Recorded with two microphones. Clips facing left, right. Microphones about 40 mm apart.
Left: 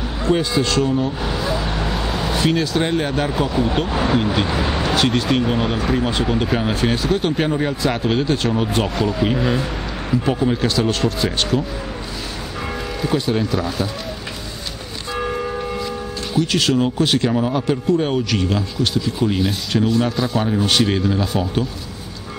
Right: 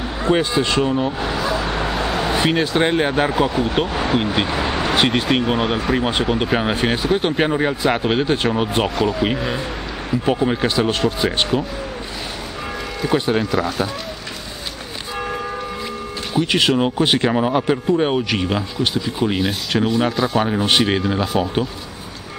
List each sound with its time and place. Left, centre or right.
0.2 s speech: right
1.2 s vehicle: centre
4.5 s speech: centre
4.9 s speech: right
9.4 s speech: centre
10.2 s speech: centre
13.1 s speech: right
13.5 s speech: centre
16.3 s speech: right
20.4 s speech: right